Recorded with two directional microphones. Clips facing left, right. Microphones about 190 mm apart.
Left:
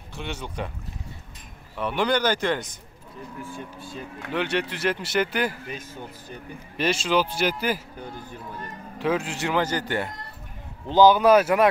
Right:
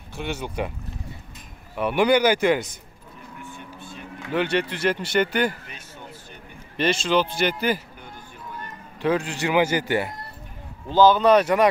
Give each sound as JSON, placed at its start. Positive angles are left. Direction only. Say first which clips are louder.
{"t": 0.1, "sound": "speech", "louder": "right 4 dB", "side_deg": -5}
{"t": 1.8, "sound": "speech", "louder": "right 5 dB", "side_deg": -10}
{"t": 4.3, "sound": "speech", "louder": "right 3 dB", "side_deg": 0}
{"t": 6.8, "sound": "speech", "louder": "right 2 dB", "side_deg": 5}
{"t": 8.9, "sound": "speech", "louder": "right 2 dB", "side_deg": 0}
{"t": 10.9, "sound": "speech", "louder": "even", "side_deg": 15}